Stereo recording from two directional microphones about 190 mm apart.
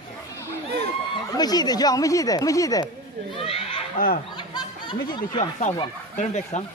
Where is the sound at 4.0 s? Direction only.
45° left (ahead or behind).